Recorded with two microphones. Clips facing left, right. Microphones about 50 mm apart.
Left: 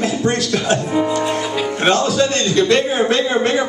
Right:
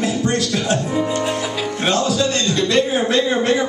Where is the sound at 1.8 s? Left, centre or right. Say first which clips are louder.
Left 3 dB; left.